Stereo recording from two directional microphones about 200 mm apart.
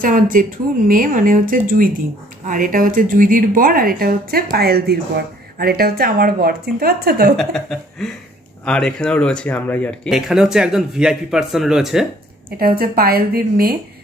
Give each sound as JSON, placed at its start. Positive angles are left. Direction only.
{"t": 0.0, "sound": "speech", "side_deg": -40}
{"t": 7.3, "sound": "speech", "side_deg": 0}
{"t": 12.5, "sound": "speech", "side_deg": -50}